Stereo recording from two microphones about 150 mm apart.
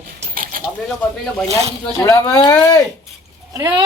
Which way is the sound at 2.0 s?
15° left (ahead or behind).